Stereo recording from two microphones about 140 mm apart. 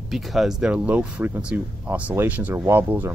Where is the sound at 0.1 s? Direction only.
Centre (ahead or behind).